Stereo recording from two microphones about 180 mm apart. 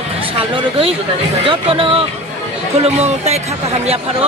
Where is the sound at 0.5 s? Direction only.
30° right (ahead or behind).